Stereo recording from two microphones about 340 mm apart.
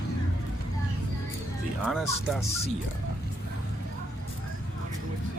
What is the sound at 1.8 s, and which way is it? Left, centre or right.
Speech, centre.